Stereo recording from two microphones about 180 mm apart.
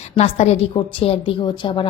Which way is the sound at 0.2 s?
35° left (ahead or behind).